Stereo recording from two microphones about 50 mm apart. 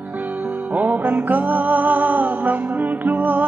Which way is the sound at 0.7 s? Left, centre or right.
Right.